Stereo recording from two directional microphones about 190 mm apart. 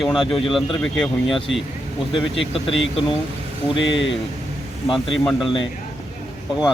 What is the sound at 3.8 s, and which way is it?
Speech, 75° left (ahead or behind).